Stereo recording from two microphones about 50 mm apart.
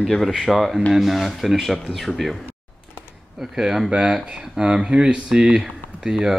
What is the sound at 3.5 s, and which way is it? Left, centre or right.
Speech, centre.